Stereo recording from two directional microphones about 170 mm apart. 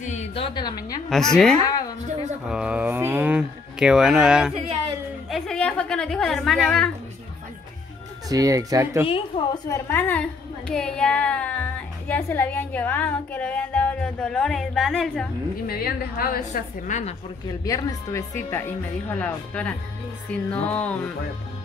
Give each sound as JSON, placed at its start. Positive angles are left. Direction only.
{"t": 0.0, "sound": "a woman's voice", "side_deg": 40}
{"t": 1.1, "sound": "speech", "side_deg": 5}
{"t": 1.6, "sound": "music", "side_deg": 20}
{"t": 2.4, "sound": "speech", "side_deg": -5}
{"t": 5.3, "sound": "a sound", "side_deg": 5}
{"t": 8.3, "sound": "speech", "side_deg": -20}
{"t": 9.0, "sound": "a woman's voice", "side_deg": 35}
{"t": 9.7, "sound": "a woman's voice", "side_deg": 15}
{"t": 15.6, "sound": "a woman's voice", "side_deg": 60}
{"t": 17.6, "sound": "a woman's voice", "side_deg": 20}